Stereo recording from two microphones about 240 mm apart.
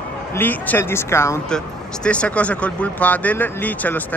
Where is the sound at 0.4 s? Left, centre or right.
Centre.